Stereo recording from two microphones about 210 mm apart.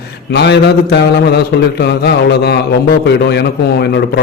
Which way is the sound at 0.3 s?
55° left (ahead or behind).